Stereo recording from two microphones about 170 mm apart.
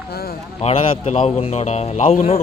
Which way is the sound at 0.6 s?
35° left (ahead or behind).